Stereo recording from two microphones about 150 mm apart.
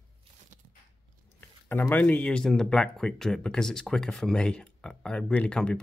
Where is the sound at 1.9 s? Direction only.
10° left (ahead or behind).